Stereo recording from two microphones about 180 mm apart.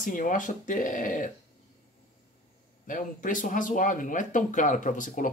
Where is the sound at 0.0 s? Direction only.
50° left (ahead or behind).